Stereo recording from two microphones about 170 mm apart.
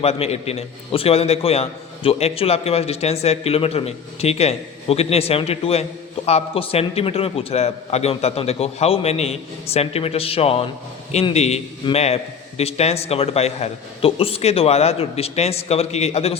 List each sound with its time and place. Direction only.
0.0 s a man's voice: 35° left (ahead or behind)